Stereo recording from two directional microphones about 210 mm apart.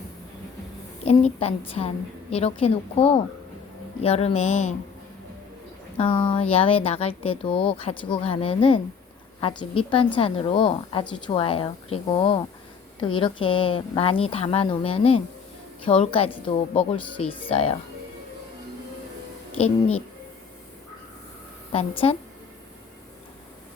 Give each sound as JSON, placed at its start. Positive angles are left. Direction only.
{"t": 1.4, "sound": "speech", "side_deg": 30}
{"t": 6.0, "sound": "speech", "side_deg": 25}
{"t": 21.7, "sound": "speech", "side_deg": 25}